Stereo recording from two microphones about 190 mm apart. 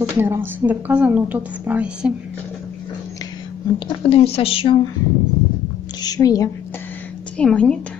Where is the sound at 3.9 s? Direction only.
30° left (ahead or behind).